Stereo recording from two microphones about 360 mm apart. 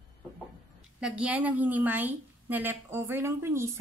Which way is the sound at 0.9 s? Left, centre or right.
Centre.